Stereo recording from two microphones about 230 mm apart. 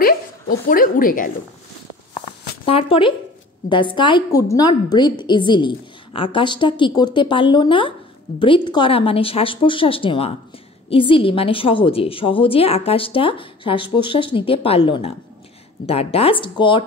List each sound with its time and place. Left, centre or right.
0.0 s speech: left
2.6 s a woman's voice: left